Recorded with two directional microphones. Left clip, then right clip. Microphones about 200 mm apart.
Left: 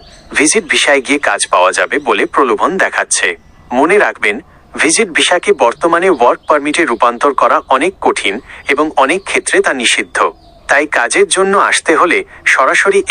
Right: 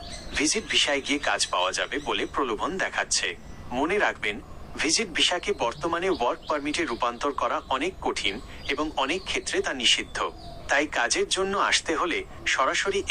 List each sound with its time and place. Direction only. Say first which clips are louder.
0.3 s speech: left 13 dB; 40° left (ahead or behind)